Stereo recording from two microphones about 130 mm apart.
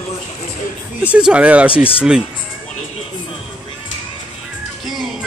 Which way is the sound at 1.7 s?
45° left (ahead or behind).